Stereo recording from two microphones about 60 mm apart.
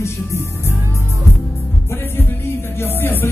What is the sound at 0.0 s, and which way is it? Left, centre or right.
Music, left.